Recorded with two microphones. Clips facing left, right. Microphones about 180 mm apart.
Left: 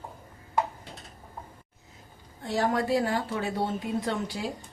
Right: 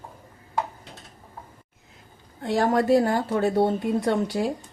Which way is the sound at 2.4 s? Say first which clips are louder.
Right 6 dB; 50° right (ahead or behind).